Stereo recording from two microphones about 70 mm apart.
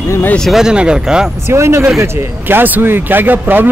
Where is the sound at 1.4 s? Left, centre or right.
Right.